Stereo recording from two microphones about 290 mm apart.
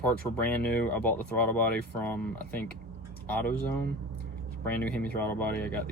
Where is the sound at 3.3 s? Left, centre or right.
Centre.